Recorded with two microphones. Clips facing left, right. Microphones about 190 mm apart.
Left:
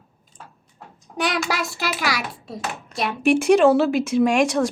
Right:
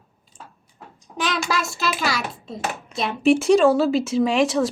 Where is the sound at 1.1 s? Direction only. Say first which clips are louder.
Even; 15° left (ahead or behind).